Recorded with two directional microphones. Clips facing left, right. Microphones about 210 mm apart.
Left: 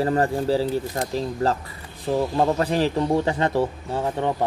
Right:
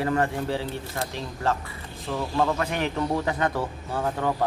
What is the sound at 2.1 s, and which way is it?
Speech, 35° left (ahead or behind).